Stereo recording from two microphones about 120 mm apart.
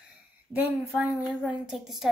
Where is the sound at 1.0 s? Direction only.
5° right (ahead or behind).